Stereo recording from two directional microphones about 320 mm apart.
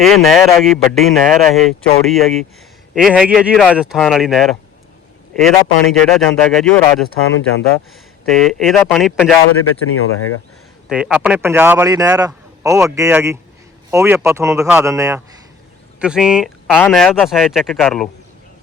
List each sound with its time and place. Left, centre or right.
0.0 s speech: centre
8.2 s speech: centre
9.6 s speech: left
10.8 s a man's voice: centre